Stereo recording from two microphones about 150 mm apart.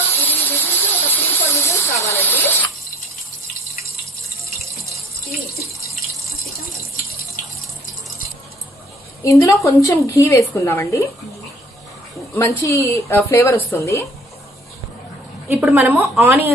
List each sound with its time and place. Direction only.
0.2 s a sound: 10° left (ahead or behind)
2.1 s a woman's voice: 10° left (ahead or behind)
9.2 s a woman's voice: 20° left (ahead or behind)
12.4 s a woman's voice: 20° left (ahead or behind)
15.4 s a woman's voice: 10° right (ahead or behind)